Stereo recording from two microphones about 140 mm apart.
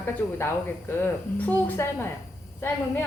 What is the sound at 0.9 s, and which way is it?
A woman's voice, 15° left (ahead or behind).